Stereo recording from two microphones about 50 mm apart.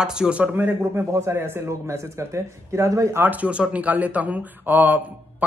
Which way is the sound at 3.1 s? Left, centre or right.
Right.